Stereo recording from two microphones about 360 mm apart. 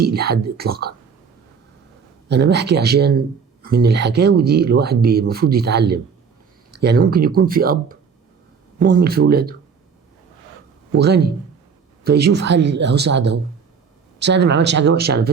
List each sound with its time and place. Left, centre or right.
0.0 s speech: right
2.3 s speech: right
9.0 s speech: right
10.9 s speech: right